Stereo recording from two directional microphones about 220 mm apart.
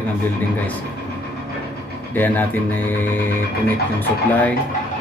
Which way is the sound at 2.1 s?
10° left (ahead or behind).